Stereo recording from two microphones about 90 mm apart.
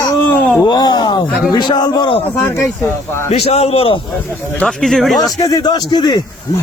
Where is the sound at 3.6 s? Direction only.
90° left.